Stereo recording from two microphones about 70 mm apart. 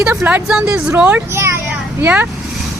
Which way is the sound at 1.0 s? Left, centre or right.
Right.